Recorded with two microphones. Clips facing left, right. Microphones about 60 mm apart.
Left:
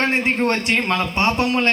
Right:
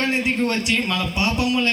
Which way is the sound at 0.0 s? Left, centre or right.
Left.